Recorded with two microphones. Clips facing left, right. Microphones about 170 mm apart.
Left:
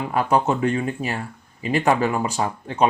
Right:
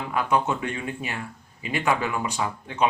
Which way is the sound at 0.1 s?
40° left (ahead or behind).